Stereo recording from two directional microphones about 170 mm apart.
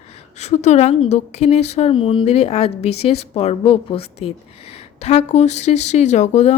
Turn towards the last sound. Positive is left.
turn(degrees=40)  # may be behind; listen again after turning